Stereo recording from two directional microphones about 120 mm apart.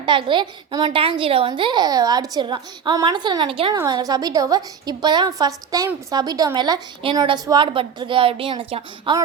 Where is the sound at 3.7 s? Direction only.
35° right (ahead or behind).